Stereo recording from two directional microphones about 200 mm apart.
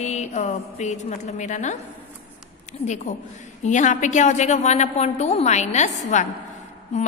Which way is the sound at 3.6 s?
35° left (ahead or behind).